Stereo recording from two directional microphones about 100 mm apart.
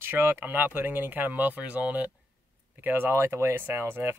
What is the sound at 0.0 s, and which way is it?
Speech, 20° right (ahead or behind).